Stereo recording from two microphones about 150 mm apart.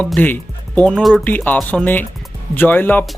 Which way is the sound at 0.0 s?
10° left (ahead or behind).